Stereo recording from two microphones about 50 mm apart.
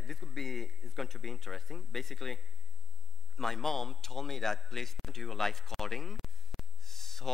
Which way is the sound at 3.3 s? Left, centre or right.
Centre.